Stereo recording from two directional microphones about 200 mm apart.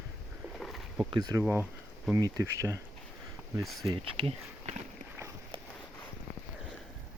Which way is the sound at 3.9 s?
30° right (ahead or behind).